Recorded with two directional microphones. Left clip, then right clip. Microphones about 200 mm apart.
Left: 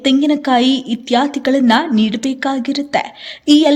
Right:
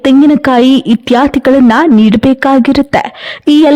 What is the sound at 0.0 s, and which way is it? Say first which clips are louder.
Speech: right 8 dB; 50° right (ahead or behind).